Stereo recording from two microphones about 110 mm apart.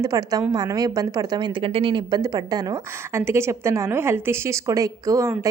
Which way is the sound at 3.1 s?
25° right (ahead or behind).